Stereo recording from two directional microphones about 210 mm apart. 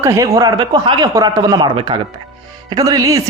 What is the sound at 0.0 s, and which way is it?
A man's voice, 15° right (ahead or behind).